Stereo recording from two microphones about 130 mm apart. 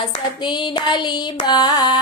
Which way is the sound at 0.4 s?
35° left (ahead or behind).